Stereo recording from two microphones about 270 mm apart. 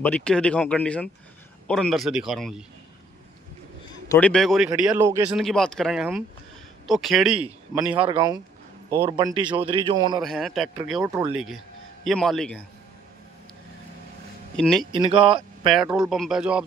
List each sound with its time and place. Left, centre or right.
0.0 s speech: centre
4.1 s speech: centre
5.4 s speech: centre
10.2 s a man's voice: centre
14.6 s speech: centre
14.9 s speech: centre
15.7 s speech: centre